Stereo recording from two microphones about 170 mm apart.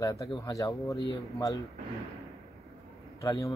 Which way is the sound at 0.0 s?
20° left (ahead or behind).